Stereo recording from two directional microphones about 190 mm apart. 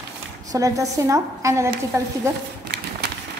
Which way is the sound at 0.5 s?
15° right (ahead or behind).